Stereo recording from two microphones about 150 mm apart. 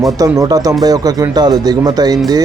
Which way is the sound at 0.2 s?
25° right (ahead or behind).